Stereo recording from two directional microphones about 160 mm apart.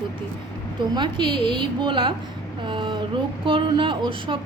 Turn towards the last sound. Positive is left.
turn(degrees=-30)  # may be behind; listen again after turning